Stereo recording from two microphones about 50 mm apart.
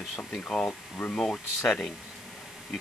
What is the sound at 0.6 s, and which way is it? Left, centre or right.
Speech, left.